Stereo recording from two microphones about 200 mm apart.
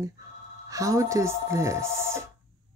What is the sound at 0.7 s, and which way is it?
Speech, 15° right (ahead or behind).